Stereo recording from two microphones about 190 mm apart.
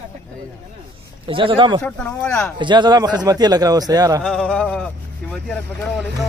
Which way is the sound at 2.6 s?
25° right (ahead or behind).